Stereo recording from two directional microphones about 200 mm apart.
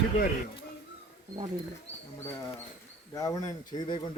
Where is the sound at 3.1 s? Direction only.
15° left (ahead or behind).